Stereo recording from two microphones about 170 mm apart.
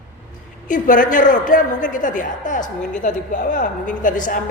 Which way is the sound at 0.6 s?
50° left (ahead or behind).